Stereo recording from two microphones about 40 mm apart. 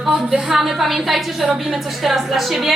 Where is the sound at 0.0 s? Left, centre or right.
Centre.